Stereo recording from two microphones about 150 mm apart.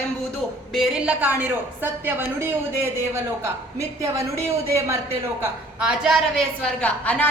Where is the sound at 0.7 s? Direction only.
5° right (ahead or behind).